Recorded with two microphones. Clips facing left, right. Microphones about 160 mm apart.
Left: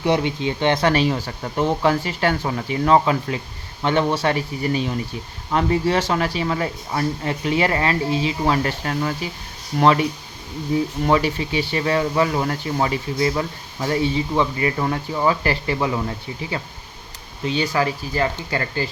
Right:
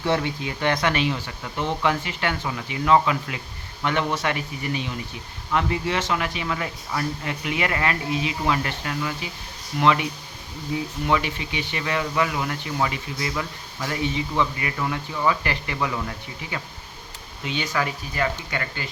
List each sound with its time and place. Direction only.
0.0 s speech: 20° left (ahead or behind)
17.4 s speech: 35° left (ahead or behind)